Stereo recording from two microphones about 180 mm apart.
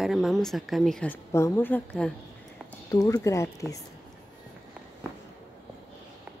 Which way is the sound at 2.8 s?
20° left (ahead or behind).